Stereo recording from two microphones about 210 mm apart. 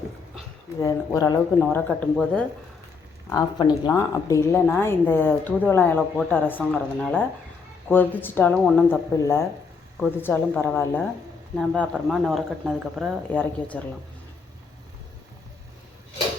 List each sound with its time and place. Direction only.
0.8 s speech: 15° left (ahead or behind)
3.3 s speech: 20° left (ahead or behind)